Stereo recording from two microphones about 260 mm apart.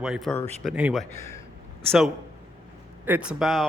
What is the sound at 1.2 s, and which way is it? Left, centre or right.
Speech, centre.